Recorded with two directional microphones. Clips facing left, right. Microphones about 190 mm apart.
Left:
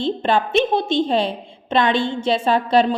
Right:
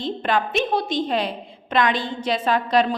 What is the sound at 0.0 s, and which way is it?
A woman's voice, 30° left (ahead or behind).